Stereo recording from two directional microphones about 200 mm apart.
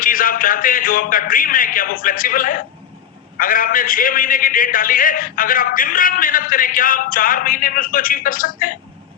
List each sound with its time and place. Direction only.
0.0 s a man's voice: 45° left (ahead or behind)